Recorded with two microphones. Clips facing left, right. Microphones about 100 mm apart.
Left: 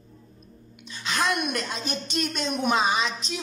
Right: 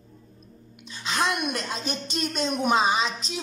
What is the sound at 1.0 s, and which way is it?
Gasp, 25° right (ahead or behind).